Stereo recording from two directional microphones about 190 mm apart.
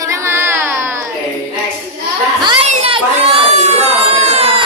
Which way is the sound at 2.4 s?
25° right (ahead or behind).